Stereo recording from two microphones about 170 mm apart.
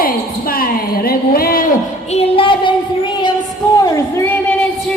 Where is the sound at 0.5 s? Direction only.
60° left (ahead or behind).